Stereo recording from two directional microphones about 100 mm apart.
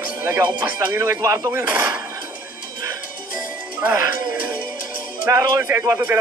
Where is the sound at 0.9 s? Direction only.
30° right (ahead or behind).